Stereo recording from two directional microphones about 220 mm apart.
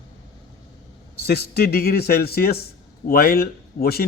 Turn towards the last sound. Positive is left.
turn(degrees=45)  # may be behind; listen again after turning